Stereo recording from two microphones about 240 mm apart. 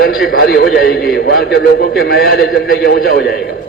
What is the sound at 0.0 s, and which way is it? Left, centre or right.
A man's voice, left.